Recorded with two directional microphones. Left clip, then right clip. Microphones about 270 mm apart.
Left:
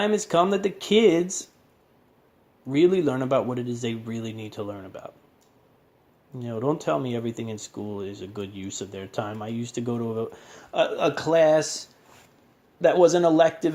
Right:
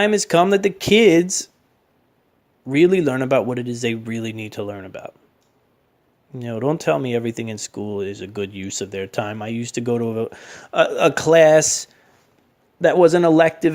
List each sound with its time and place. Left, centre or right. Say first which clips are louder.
0.0 s speech: right 6 dB; right
2.6 s speech: right 5 dB; right
6.3 s speech: right 4 dB; right